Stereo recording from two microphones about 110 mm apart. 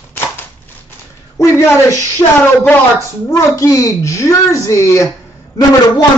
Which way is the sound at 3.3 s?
30° left (ahead or behind).